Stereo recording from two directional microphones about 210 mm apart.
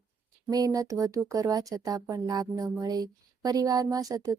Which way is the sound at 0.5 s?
15° right (ahead or behind).